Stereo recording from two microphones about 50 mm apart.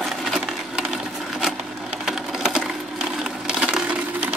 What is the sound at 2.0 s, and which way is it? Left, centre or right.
Sewing machine, centre.